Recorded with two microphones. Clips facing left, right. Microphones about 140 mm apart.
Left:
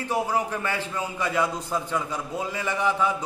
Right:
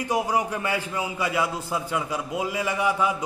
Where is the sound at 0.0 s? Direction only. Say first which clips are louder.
Right 1 dB; 15° right (ahead or behind).